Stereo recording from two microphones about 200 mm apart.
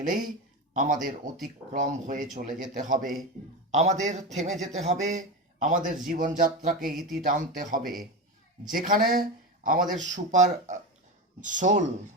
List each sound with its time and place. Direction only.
0.0 s a man's voice: 40° right (ahead or behind)